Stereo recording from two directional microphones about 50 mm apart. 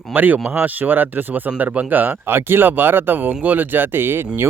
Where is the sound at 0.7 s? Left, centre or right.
Right.